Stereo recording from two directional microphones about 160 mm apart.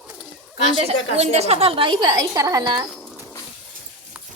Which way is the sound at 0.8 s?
40° right (ahead or behind).